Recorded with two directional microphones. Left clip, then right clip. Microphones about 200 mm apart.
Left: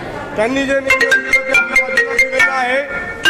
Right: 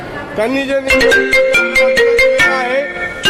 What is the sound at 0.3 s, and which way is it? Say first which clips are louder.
Speech: even; 45° right (ahead or behind).